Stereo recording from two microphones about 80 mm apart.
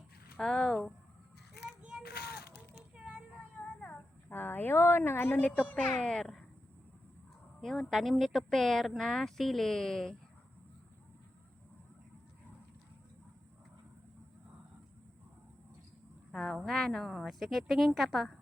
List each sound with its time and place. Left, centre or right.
0.3 s speech: centre
3.3 s a sound: centre
5.5 s speech: centre
7.6 s speech: centre
16.3 s speech: centre